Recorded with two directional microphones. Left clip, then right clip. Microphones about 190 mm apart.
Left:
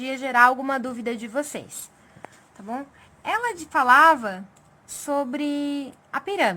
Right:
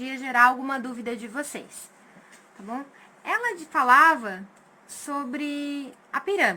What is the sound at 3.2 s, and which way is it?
A woman's voice, 65° left (ahead or behind).